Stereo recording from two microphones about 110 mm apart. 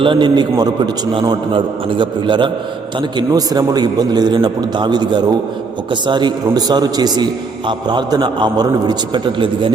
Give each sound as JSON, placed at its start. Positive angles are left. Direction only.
{"t": 0.0, "sound": "a man's voice", "side_deg": -45}
{"t": 3.2, "sound": "a man's voice", "side_deg": -35}